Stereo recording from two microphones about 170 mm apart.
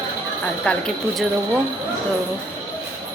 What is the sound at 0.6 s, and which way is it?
Speech, 5° left (ahead or behind).